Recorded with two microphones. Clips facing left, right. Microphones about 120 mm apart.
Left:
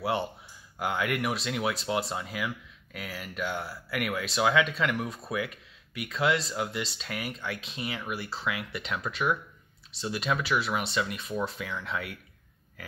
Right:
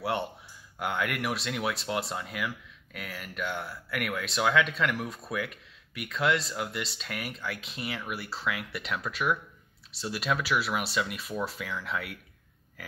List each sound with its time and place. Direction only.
0.0 s speech: centre (ahead or behind)